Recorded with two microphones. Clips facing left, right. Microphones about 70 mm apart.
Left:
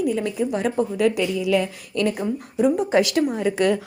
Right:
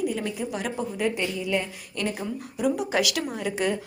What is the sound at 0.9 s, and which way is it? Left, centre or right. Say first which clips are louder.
Speech: left 6 dB; left.